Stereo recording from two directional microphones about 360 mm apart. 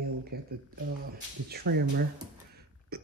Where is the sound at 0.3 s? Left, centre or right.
Right.